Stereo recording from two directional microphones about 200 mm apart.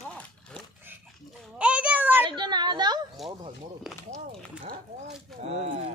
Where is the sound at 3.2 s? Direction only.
Centre (ahead or behind).